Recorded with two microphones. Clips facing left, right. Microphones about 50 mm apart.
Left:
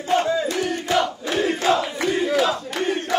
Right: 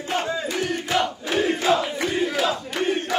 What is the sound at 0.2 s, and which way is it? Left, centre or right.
Crowd, centre.